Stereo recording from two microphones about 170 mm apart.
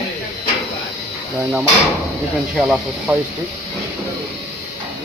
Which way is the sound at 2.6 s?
Centre (ahead or behind).